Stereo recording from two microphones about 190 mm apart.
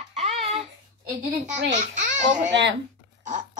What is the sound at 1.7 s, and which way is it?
Speech, 40° right (ahead or behind).